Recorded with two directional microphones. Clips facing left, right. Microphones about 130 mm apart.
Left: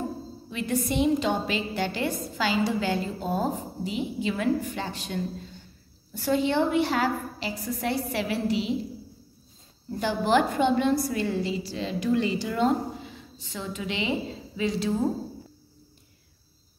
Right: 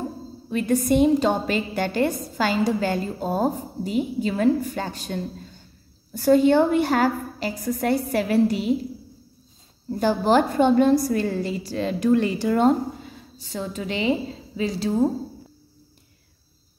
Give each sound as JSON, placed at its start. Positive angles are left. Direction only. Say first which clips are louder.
{"t": 0.5, "sound": "a woman's voice", "louder": "right 8 dB", "side_deg": -45}
{"t": 9.8, "sound": "a woman's voice", "louder": "right 5 dB", "side_deg": -40}